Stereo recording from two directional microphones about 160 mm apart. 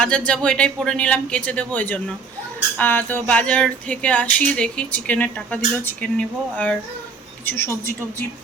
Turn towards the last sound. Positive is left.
turn(degrees=15)  # may be behind; listen again after turning